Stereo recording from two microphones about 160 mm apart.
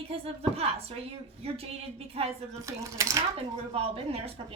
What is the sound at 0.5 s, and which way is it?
A woman's voice, 40° right (ahead or behind).